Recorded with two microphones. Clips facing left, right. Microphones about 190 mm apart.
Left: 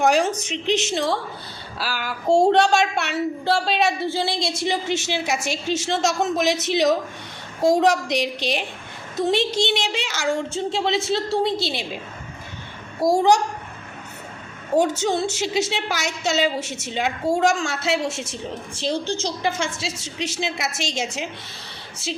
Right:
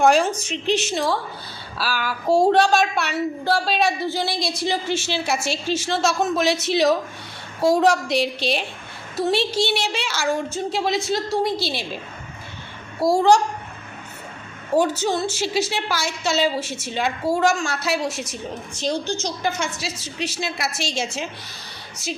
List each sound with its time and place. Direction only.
0.3 s a woman's voice: 20° left (ahead or behind)
13.0 s a woman's voice: 20° left (ahead or behind)
14.8 s a woman's voice: 25° left (ahead or behind)